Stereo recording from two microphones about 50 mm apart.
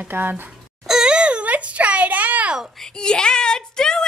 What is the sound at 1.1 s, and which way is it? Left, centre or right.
A woman's voice, right.